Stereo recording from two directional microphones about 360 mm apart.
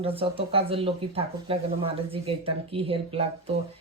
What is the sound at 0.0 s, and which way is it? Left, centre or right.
Speech, centre.